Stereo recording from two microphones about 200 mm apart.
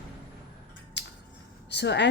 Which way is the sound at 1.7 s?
60° left (ahead or behind).